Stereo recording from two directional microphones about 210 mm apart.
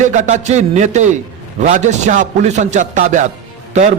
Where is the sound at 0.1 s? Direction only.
35° right (ahead or behind).